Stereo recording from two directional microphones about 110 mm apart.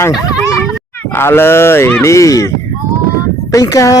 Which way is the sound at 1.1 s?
20° left (ahead or behind).